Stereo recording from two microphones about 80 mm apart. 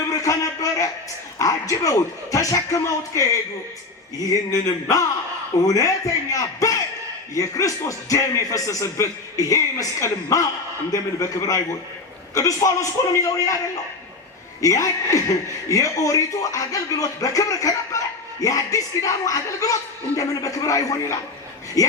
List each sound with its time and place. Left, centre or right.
0.1 s speech: left
14.6 s speech: left